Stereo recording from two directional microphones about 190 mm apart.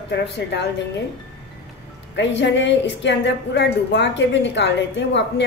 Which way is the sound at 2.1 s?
70° left (ahead or behind).